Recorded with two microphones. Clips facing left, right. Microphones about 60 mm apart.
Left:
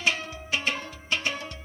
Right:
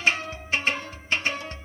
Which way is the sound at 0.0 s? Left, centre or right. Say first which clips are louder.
Right 3 dB; right.